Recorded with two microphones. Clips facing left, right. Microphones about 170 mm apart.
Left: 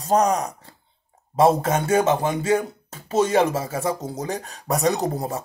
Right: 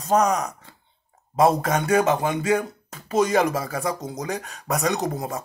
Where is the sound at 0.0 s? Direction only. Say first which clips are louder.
Left 1 dB; 35° left (ahead or behind).